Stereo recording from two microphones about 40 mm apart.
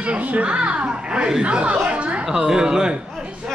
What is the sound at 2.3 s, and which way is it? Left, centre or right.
Speech, centre.